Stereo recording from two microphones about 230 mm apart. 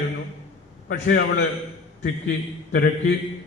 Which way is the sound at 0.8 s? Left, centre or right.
Left.